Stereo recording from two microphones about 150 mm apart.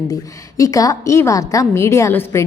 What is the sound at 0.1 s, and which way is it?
A woman's voice, 20° left (ahead or behind).